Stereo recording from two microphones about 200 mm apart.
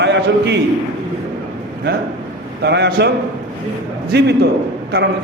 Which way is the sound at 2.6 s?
55° right (ahead or behind).